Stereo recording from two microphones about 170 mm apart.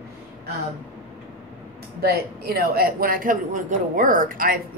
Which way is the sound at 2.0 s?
65° right (ahead or behind).